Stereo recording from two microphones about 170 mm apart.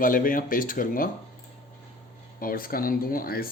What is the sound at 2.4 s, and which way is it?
Speech, 60° left (ahead or behind).